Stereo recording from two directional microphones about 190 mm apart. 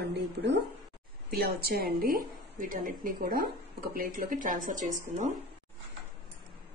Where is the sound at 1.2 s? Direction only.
55° right (ahead or behind).